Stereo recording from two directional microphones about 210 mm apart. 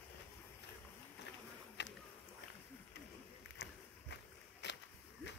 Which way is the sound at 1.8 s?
55° left (ahead or behind).